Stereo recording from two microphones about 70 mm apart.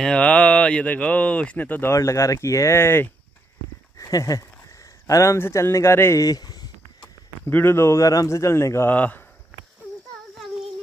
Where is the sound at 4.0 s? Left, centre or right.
Left.